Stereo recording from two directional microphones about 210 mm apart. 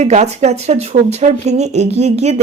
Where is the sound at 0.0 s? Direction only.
30° right (ahead or behind).